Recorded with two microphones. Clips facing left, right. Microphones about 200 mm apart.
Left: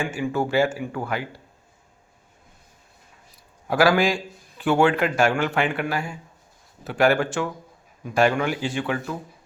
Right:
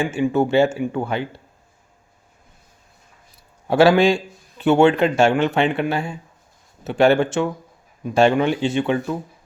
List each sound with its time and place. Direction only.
0.0 s a man's voice: 25° right (ahead or behind)
3.7 s a man's voice: 25° right (ahead or behind)